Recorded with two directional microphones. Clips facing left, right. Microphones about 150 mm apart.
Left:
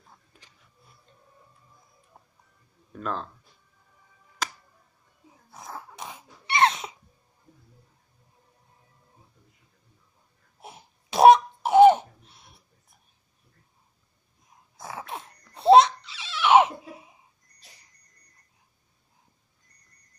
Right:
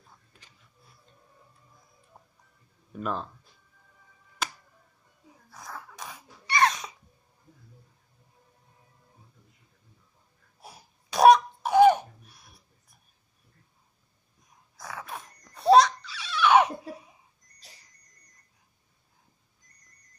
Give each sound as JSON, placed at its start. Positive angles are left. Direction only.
{"t": 2.9, "sound": "speech", "side_deg": -5}
{"t": 5.5, "sound": "dog", "side_deg": 25}
{"t": 10.6, "sound": "cough", "side_deg": 25}
{"t": 14.8, "sound": "laughter", "side_deg": 25}